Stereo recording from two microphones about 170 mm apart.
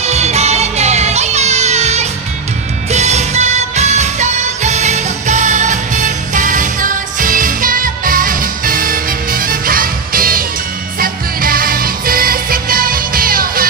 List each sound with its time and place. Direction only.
0.0 s music: 40° right (ahead or behind); by 13.7 s 60° right (ahead or behind)